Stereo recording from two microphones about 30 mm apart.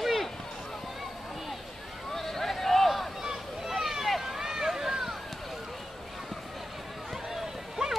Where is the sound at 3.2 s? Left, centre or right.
Centre.